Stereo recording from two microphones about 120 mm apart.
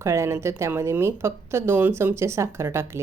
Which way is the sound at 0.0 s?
25° right (ahead or behind).